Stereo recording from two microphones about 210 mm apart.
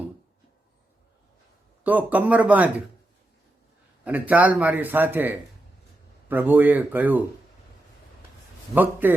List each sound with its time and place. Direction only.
1.8 s a man's voice: 10° right (ahead or behind)
4.0 s a man's voice: 5° right (ahead or behind)
8.7 s a man's voice: 10° right (ahead or behind)